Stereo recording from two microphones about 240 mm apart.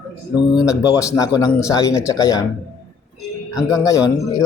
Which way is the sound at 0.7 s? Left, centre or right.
Centre.